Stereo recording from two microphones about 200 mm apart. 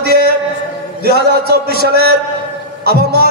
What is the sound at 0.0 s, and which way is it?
Chant, 55° right (ahead or behind).